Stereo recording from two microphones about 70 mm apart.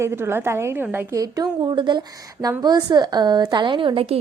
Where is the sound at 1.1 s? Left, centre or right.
Right.